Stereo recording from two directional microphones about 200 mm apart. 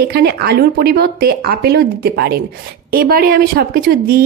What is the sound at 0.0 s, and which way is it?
A woman's voice, 55° right (ahead or behind).